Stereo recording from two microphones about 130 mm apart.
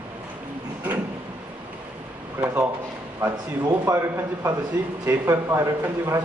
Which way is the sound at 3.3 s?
30° right (ahead or behind).